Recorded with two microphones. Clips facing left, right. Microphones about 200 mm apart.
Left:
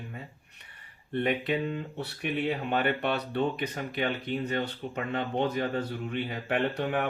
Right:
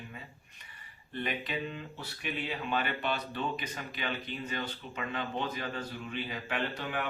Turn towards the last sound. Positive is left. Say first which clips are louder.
# left 7 dB
turn(degrees=55)  # may be behind; listen again after turning